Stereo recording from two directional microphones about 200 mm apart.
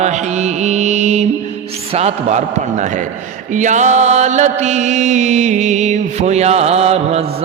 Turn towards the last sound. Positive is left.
turn(degrees=-30)  # may be behind; listen again after turning